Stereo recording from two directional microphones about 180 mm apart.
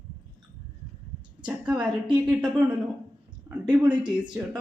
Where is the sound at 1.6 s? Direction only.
5° right (ahead or behind).